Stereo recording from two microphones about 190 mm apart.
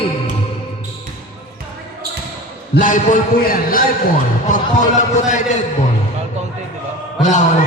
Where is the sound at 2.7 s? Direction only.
45° left (ahead or behind).